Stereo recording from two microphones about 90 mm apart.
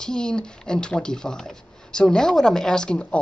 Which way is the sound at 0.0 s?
10° left (ahead or behind).